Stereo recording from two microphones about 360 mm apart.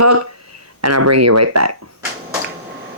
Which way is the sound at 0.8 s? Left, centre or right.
Right.